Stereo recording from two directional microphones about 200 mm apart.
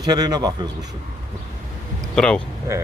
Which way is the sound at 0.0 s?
20° right (ahead or behind).